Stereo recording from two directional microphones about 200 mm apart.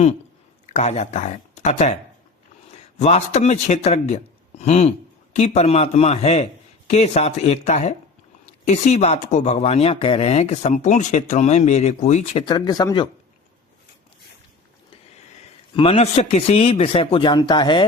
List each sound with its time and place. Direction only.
0.7 s speech: 35° left (ahead or behind)
3.0 s speech: 35° left (ahead or behind)
15.7 s speech: 30° left (ahead or behind)